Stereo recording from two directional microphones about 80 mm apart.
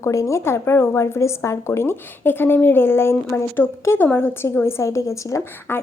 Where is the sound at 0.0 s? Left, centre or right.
Left.